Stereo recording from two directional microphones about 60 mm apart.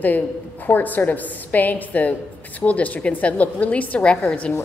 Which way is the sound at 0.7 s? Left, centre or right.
Left.